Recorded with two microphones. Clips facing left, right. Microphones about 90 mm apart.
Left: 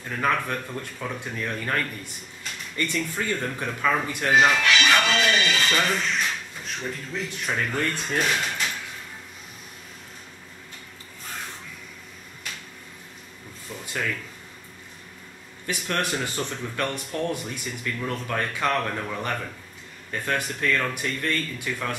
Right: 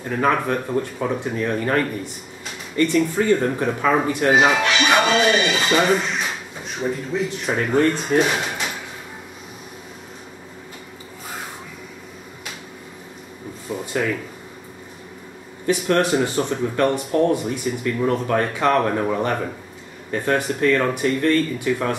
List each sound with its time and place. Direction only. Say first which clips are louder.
0.0 s speech: right 6 dB; 20° right (ahead or behind)
3.0 s speech: right 11 dB; 10° right (ahead or behind)
3.3 s speech: right 8 dB; 25° right (ahead or behind)
4.3 s speech: right 3 dB; 5° right (ahead or behind)
4.6 s speech: right 3 dB; 30° right (ahead or behind)
5.5 s speech: right 5 dB; 15° right (ahead or behind)
5.9 s speech: right 3 dB; 5° right (ahead or behind)
7.6 s speech: right 13 dB; 20° right (ahead or behind)
8.0 s speech: right 8 dB; 10° right (ahead or behind)
8.4 s drawer open or close: right 3 dB; 10° right (ahead or behind)
13.9 s speech: right 6 dB; 15° right (ahead or behind)
15.6 s speech: right 9 dB; 15° right (ahead or behind)
17.5 s speech: right 9 dB; 10° right (ahead or behind)
17.9 s speech: right 9 dB; 25° right (ahead or behind)